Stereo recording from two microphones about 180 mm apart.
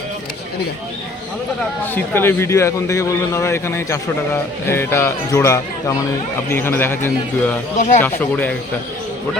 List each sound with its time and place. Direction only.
1.8 s speech: 10° left (ahead or behind)
7.8 s speech: 45° left (ahead or behind)
8.0 s speech: 10° left (ahead or behind)